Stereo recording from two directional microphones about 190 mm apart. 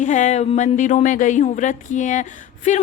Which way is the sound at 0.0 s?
40° left (ahead or behind).